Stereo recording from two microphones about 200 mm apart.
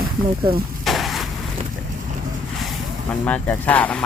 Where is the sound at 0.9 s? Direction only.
Centre (ahead or behind).